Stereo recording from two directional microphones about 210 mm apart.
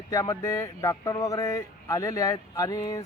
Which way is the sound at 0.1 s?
15° left (ahead or behind).